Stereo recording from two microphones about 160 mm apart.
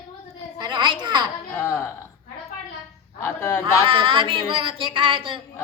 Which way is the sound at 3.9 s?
30° right (ahead or behind).